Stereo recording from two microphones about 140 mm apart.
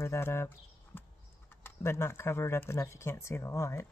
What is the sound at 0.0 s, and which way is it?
Speech, 20° left (ahead or behind).